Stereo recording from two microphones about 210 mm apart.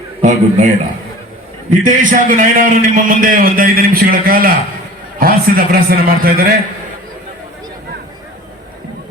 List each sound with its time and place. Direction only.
0.2 s a man's voice: 35° right (ahead or behind)
1.8 s a man's voice: 40° right (ahead or behind)